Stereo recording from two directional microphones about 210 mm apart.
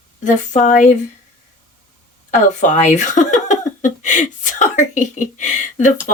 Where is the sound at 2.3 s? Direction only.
35° left (ahead or behind).